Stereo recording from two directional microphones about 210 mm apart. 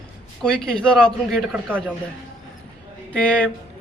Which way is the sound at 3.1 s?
5° left (ahead or behind).